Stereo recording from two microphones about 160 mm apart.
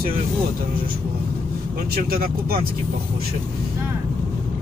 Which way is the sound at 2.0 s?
70° right (ahead or behind).